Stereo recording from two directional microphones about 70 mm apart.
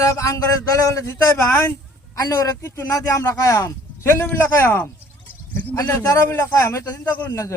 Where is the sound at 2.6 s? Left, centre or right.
Left.